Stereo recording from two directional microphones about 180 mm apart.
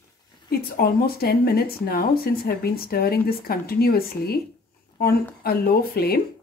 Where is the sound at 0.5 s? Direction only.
55° left (ahead or behind).